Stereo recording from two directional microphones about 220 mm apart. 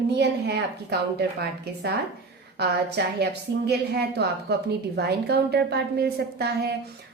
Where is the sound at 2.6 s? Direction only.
50° right (ahead or behind).